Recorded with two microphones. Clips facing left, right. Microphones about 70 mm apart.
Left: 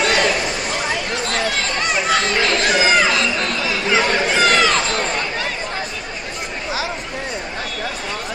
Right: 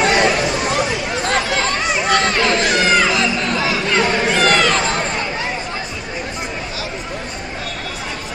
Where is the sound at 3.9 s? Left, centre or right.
Centre.